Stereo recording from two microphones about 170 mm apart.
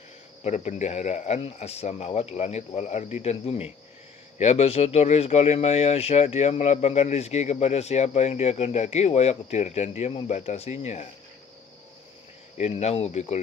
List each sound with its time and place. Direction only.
0.4 s speech: 45° left (ahead or behind)
12.5 s speech: 40° left (ahead or behind)